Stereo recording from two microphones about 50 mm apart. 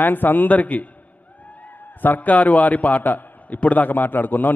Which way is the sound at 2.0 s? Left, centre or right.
Left.